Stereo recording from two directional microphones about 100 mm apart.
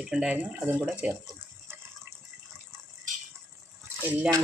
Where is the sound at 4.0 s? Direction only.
20° right (ahead or behind).